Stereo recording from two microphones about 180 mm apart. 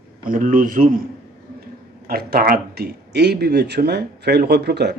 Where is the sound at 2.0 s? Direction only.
55° right (ahead or behind).